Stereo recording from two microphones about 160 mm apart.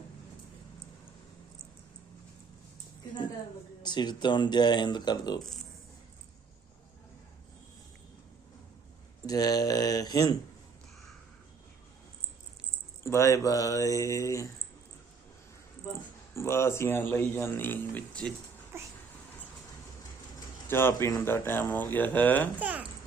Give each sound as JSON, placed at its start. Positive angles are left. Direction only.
{"t": 3.8, "sound": "speech", "side_deg": 25}
{"t": 5.4, "sound": "speech", "side_deg": 0}
{"t": 9.2, "sound": "speech", "side_deg": 20}
{"t": 13.0, "sound": "speech", "side_deg": 15}
{"t": 16.3, "sound": "speech", "side_deg": 15}
{"t": 18.7, "sound": "a sound", "side_deg": -15}
{"t": 20.7, "sound": "speech", "side_deg": 15}
{"t": 22.5, "sound": "speech", "side_deg": -10}